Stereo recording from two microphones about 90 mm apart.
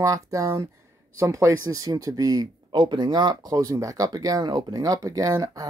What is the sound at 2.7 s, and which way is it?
Speech, 60° right (ahead or behind).